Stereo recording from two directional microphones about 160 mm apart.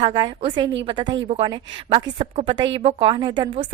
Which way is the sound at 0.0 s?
30° right (ahead or behind).